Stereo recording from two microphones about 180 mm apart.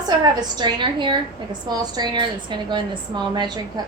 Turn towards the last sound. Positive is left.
turn(degrees=-25)  # may be behind; listen again after turning